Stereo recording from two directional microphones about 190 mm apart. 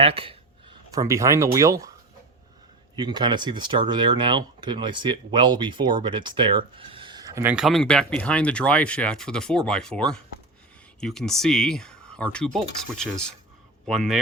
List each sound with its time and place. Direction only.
0.0 s a sound: 30° right (ahead or behind)
1.5 s speech: 15° right (ahead or behind)
2.9 s speech: 25° right (ahead or behind)
7.5 s speech: centre (ahead or behind)